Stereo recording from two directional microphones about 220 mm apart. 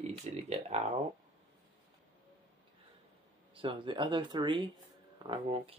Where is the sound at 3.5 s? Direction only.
25° right (ahead or behind).